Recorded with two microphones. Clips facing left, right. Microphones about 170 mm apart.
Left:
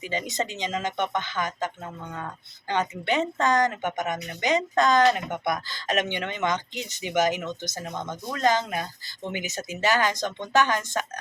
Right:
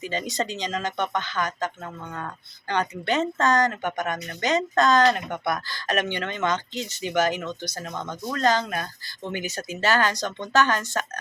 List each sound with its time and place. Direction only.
0.0 s speech: 15° left (ahead or behind)